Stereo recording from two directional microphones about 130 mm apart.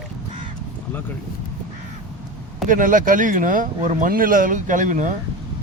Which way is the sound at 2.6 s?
90° right.